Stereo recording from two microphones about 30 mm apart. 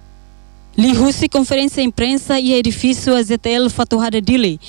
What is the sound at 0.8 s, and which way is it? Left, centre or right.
Speech, left.